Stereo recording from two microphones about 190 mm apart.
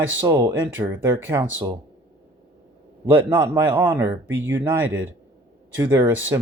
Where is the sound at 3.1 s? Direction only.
10° right (ahead or behind).